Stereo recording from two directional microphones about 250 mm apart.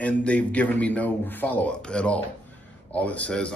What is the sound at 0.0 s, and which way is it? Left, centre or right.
A man's voice, centre.